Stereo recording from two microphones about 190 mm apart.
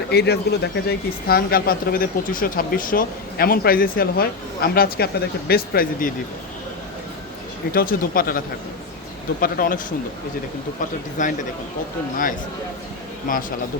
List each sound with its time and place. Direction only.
0.1 s speech: 60° left (ahead or behind)
7.7 s speech: 50° left (ahead or behind)
9.4 s speech: 45° left (ahead or behind)
11.2 s speech: 40° left (ahead or behind)
13.3 s speech: 45° left (ahead or behind)